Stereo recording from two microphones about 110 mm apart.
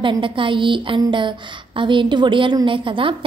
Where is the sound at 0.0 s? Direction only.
50° right (ahead or behind).